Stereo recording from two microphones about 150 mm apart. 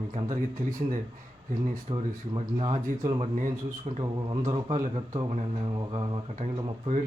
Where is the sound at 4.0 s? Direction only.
30° right (ahead or behind).